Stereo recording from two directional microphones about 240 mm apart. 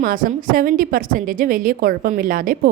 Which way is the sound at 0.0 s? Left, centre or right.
Right.